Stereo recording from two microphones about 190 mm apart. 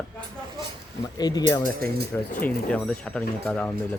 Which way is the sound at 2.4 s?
5° left (ahead or behind).